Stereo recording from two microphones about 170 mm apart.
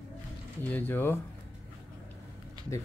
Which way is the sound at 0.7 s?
10° left (ahead or behind).